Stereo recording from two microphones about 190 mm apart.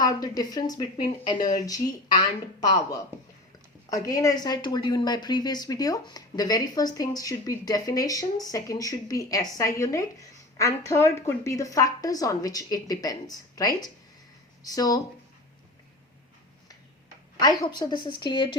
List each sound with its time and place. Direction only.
0.0 s a woman's voice: 20° left (ahead or behind)
3.8 s a woman's voice: 20° left (ahead or behind)
17.4 s a woman's voice: 20° left (ahead or behind)